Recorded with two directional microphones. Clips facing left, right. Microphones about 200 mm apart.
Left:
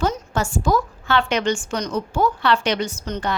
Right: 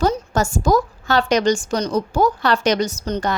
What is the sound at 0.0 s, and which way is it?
A woman's voice, 40° right (ahead or behind).